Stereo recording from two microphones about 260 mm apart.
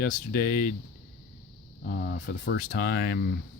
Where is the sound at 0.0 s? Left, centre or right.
Left.